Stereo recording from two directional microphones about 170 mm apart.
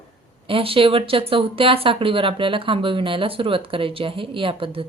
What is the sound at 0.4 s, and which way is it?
Speech, 35° right (ahead or behind).